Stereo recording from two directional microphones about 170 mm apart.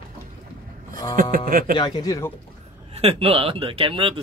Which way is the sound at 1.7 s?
25° left (ahead or behind).